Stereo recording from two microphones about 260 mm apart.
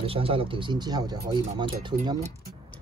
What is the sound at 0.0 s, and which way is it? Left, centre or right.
Speech, right.